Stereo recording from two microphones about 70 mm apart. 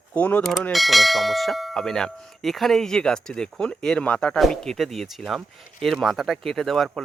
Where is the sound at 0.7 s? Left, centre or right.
Centre.